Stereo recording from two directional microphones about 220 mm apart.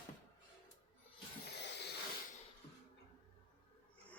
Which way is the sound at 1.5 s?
50° left (ahead or behind).